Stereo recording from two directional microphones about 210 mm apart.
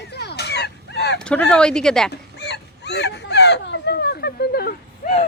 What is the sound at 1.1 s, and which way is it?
Speech, 5° left (ahead or behind).